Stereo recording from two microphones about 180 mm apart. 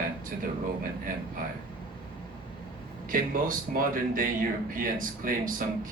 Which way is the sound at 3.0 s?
50° right (ahead or behind).